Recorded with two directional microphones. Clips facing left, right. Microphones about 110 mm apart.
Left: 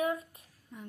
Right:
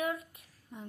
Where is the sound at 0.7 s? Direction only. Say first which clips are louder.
Right 1 dB; 20° right (ahead or behind).